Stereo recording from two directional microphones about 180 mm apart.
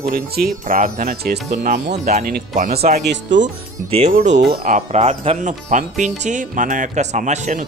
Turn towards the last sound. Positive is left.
turn(degrees=-45)  # may be behind; listen again after turning